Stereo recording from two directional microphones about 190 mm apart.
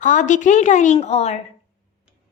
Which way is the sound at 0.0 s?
40° left (ahead or behind).